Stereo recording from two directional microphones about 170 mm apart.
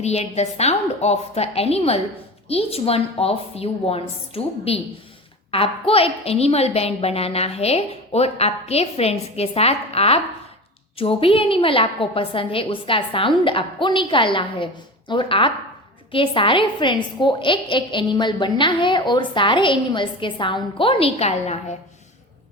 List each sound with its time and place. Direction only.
0.0 s a woman's voice: 40° left (ahead or behind)